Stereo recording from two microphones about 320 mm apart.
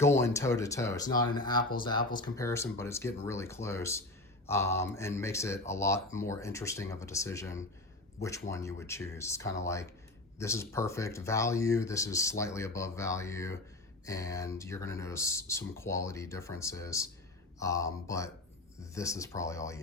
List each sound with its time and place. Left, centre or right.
0.0 s speech: centre
2.0 s speech: left
2.2 s speech: centre